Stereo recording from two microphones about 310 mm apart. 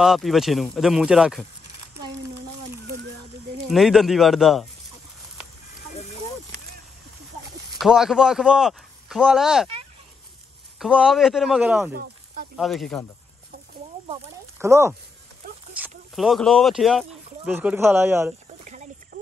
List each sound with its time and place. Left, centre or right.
0.0 s speech: centre
3.6 s speech: centre
7.8 s speech: centre
10.8 s speech: centre
11.9 s a sound: right
12.5 s speech: centre
14.6 s speech: centre
15.8 s a sound: centre
16.2 s speech: centre
18.6 s a sound: right